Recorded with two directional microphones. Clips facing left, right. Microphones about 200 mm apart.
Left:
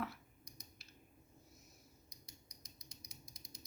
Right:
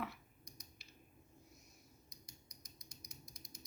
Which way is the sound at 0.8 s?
Centre (ahead or behind).